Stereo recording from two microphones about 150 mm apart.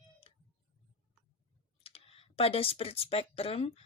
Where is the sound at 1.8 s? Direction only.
40° left (ahead or behind).